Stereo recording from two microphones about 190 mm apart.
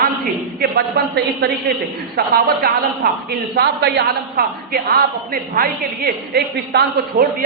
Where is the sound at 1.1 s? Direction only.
55° right (ahead or behind).